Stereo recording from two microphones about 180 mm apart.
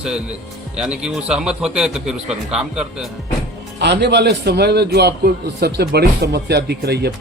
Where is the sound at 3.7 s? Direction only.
70° right (ahead or behind).